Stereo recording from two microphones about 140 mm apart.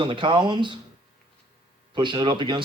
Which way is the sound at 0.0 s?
35° right (ahead or behind).